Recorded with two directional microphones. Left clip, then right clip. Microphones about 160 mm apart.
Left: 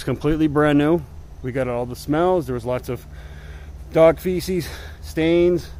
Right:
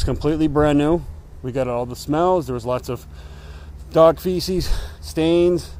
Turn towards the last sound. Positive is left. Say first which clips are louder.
# even
turn(degrees=0)  # may be behind; listen again after turning